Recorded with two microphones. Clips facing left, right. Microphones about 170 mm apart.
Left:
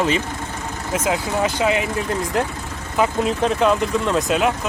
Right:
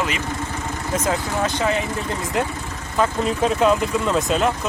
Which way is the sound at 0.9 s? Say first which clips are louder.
Left 2 dB; 10° left (ahead or behind).